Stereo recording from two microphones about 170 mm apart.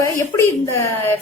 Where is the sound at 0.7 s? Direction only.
15° left (ahead or behind).